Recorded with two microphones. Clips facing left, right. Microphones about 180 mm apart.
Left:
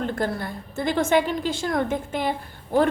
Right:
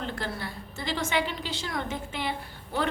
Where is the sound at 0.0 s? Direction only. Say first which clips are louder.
Left 8 dB; 50° left (ahead or behind).